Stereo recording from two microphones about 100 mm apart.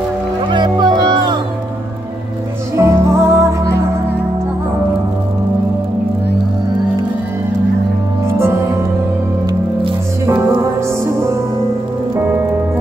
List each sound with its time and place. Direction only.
0.5 s music: 45° right (ahead or behind)
2.7 s music: 30° right (ahead or behind)
10.2 s music: 25° right (ahead or behind)